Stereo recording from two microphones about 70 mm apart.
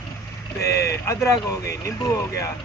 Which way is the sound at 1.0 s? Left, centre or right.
Left.